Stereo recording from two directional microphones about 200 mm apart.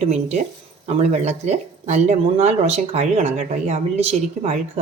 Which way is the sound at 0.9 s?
30° right (ahead or behind).